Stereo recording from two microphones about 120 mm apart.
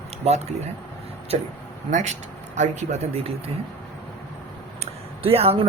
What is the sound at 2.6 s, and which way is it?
Speech, 75° right (ahead or behind).